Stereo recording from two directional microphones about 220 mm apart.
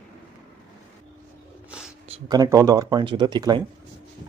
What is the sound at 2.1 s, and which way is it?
Speech, 15° right (ahead or behind).